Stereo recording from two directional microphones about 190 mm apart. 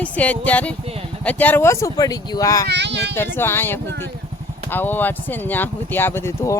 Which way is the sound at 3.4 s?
10° left (ahead or behind).